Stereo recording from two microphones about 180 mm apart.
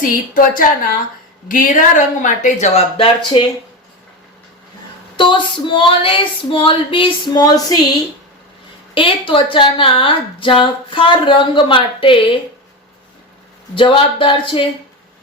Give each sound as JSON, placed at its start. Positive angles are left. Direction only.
{"t": 0.0, "sound": "speech", "side_deg": 50}
{"t": 5.1, "sound": "speech", "side_deg": 25}
{"t": 9.0, "sound": "speech", "side_deg": 30}
{"t": 13.7, "sound": "speech", "side_deg": 30}